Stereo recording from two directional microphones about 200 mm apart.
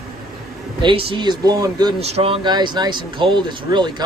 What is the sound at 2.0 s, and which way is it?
Speech, 30° right (ahead or behind).